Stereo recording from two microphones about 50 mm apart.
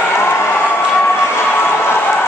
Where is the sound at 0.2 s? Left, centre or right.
Left.